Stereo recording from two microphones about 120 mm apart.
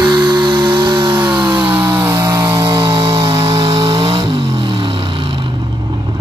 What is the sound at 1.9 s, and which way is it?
Chainsaw, 35° right (ahead or behind).